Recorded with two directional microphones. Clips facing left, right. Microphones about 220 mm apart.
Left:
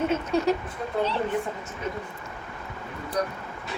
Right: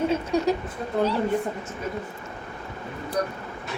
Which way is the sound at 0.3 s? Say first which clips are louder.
Even; 15° right (ahead or behind).